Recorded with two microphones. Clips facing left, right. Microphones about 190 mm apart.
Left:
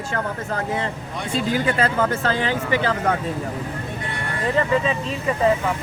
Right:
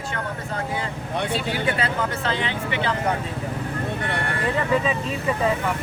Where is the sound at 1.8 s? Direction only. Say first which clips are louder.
Left 5 dB; 45° left (ahead or behind).